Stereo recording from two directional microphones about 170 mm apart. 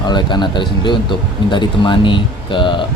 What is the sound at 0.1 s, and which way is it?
Speech, 25° left (ahead or behind).